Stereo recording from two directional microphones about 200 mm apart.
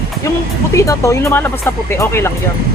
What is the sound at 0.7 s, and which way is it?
Speech, 15° left (ahead or behind).